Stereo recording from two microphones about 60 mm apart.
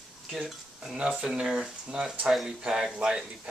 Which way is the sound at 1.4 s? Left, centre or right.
Centre.